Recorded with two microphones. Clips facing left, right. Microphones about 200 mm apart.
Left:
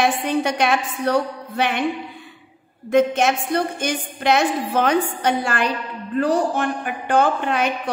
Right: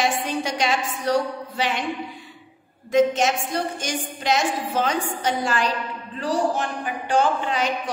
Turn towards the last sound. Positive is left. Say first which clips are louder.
# left 3 dB
turn(degrees=60)  # may be behind; listen again after turning